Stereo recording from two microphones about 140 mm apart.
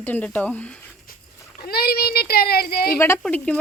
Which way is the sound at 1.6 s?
90° left.